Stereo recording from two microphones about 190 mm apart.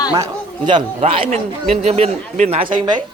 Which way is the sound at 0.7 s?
30° right (ahead or behind).